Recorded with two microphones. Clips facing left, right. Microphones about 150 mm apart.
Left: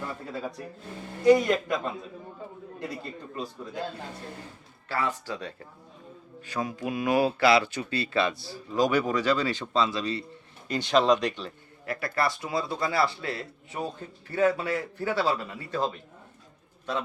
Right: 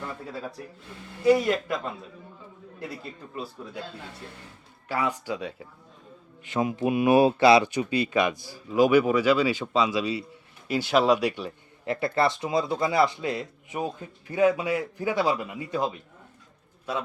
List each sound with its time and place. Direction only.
0.0 s speech: centre (ahead or behind)
4.9 s speech: 15° right (ahead or behind)
6.4 s speech: 20° right (ahead or behind)
11.9 s speech: 25° right (ahead or behind)